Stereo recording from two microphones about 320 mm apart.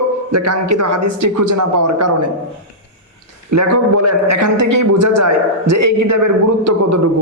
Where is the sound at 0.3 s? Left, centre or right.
Right.